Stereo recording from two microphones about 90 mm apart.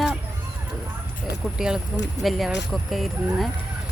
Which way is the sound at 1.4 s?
5° right (ahead or behind).